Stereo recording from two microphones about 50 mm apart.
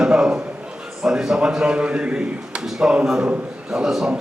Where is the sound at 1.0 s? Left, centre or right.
Centre.